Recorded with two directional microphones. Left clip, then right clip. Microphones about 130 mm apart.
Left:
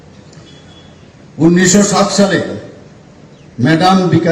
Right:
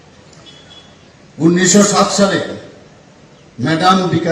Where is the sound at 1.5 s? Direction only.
25° left (ahead or behind).